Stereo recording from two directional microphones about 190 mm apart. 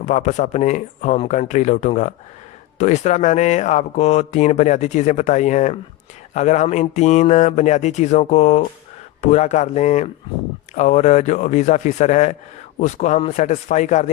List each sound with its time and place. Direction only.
0.0 s speech: 40° left (ahead or behind)